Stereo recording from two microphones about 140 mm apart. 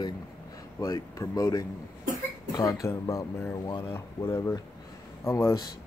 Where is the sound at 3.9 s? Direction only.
20° left (ahead or behind).